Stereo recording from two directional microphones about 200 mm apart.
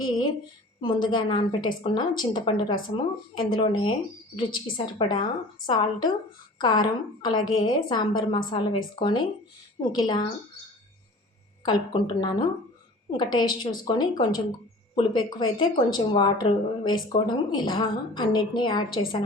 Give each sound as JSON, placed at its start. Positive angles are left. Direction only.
{"t": 0.8, "sound": "speech", "side_deg": 20}
{"t": 11.6, "sound": "speech", "side_deg": 20}